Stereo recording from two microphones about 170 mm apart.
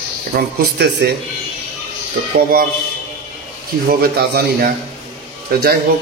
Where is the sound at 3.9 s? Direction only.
65° right (ahead or behind).